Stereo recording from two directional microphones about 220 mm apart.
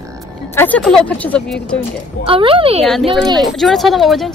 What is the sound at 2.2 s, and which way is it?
Speech, 25° right (ahead or behind).